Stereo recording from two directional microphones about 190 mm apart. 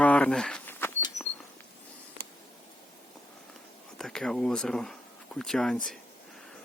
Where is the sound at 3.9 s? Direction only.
5° left (ahead or behind).